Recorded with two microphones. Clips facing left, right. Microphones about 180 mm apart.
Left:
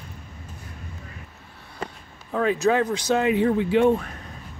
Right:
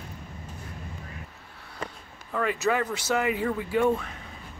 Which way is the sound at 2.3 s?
15° left (ahead or behind).